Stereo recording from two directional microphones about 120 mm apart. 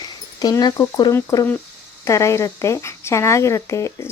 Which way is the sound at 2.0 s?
25° left (ahead or behind).